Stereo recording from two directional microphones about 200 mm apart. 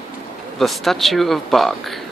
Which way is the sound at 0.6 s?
Centre (ahead or behind).